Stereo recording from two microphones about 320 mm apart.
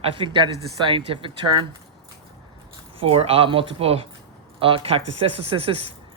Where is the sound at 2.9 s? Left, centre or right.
Centre.